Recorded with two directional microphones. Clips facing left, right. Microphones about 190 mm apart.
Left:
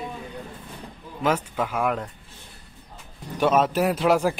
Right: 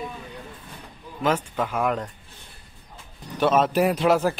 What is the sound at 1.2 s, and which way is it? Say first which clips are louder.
Speech: even; 10° left (ahead or behind).